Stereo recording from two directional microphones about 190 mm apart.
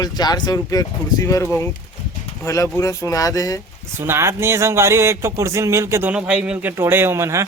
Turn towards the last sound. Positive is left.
turn(degrees=-15)  # may be behind; listen again after turning